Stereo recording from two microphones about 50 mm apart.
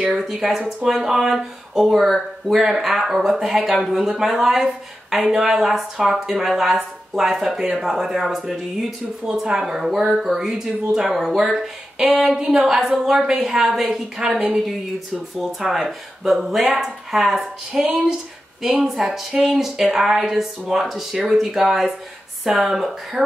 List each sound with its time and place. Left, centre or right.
0.0 s speech: centre
9.6 s speech: centre
14.2 s speech: centre
14.5 s speech: centre